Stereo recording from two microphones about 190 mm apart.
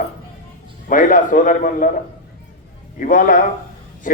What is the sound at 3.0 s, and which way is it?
Speech, 45° left (ahead or behind).